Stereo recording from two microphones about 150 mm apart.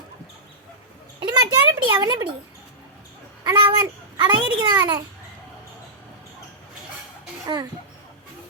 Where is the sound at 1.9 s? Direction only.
30° right (ahead or behind).